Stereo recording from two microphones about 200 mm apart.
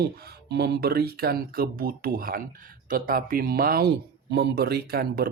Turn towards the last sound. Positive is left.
turn(degrees=-50)  # may be behind; listen again after turning